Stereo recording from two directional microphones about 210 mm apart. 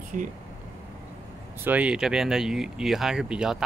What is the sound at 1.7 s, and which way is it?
Speech, 5° right (ahead or behind).